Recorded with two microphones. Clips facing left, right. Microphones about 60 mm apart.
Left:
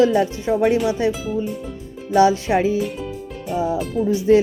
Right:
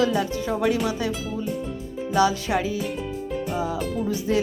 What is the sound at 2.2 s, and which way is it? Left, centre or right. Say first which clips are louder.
Speech: left 6 dB; left.